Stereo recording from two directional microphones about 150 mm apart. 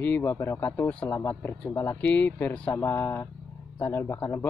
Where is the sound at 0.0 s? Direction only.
15° left (ahead or behind).